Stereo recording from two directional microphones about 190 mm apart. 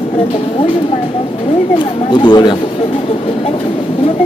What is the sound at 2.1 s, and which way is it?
Speech, 25° left (ahead or behind).